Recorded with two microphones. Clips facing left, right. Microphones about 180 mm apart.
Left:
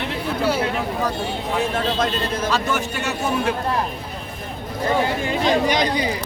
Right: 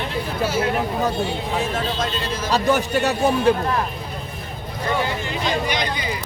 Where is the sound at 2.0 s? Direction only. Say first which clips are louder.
Left 3 dB; 55° left (ahead or behind).